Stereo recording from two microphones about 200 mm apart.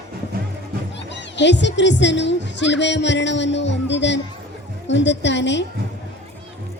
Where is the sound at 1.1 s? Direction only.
60° left (ahead or behind).